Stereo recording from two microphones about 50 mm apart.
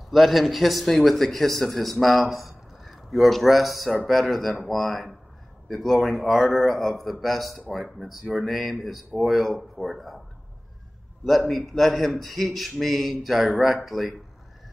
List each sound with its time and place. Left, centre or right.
0.1 s speech: centre
11.2 s speech: centre